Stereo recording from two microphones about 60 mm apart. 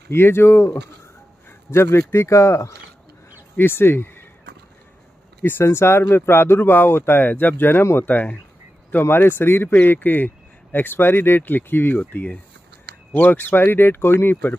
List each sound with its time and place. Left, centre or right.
0.1 s speech: left
3.5 s speech: left
5.4 s speech: left
7.2 s speech: left
8.1 s speech: left
9.0 s speech: left